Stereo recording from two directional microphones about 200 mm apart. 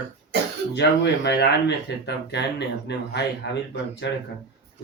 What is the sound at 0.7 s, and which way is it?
Speech, 60° left (ahead or behind).